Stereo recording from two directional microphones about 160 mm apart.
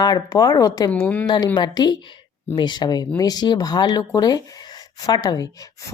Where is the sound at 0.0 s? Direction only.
25° left (ahead or behind).